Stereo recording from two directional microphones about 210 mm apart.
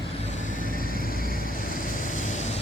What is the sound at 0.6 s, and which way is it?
Vehicle, 45° left (ahead or behind).